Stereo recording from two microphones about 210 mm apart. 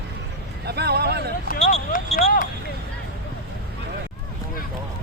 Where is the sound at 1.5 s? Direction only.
35° left (ahead or behind).